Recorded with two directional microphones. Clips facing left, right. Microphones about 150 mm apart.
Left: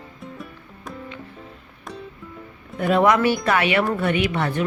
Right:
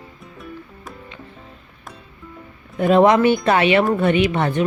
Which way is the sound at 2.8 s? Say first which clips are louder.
Right 4 dB; 25° right (ahead or behind).